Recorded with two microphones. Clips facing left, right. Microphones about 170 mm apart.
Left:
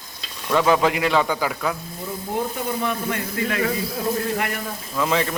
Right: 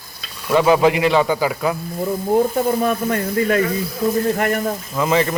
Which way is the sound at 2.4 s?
50° right (ahead or behind).